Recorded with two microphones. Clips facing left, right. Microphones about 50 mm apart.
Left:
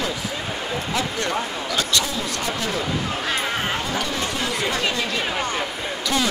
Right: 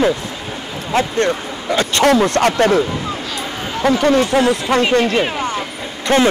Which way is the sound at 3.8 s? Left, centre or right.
Right.